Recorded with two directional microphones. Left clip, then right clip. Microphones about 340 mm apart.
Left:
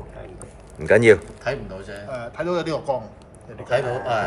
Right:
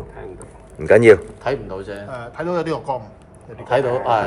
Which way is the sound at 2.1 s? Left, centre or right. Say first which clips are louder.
Right 1 dB; right.